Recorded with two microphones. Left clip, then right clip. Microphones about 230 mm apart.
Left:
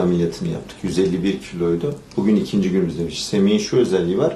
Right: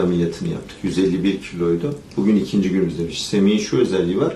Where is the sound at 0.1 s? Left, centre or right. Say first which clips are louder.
Left 1 dB; right.